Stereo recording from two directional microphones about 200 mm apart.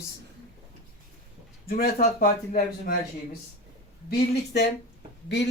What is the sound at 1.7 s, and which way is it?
A man's voice, 50° left (ahead or behind).